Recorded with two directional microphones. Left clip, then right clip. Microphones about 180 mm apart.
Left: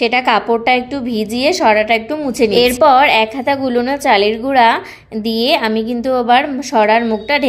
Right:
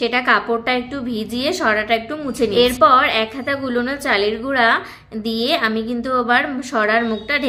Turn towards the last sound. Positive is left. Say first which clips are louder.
# left 5 dB
turn(degrees=20)  # may be behind; listen again after turning